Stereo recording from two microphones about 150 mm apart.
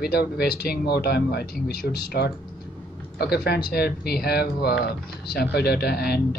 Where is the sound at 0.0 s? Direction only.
90° left.